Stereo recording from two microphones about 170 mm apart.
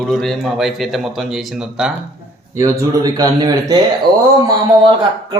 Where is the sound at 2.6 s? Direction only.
15° right (ahead or behind).